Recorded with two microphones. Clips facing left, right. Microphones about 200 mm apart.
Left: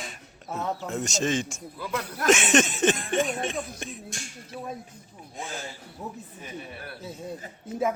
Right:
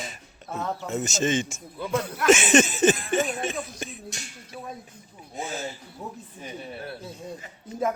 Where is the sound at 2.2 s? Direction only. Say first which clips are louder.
Right 2 dB; centre (ahead or behind).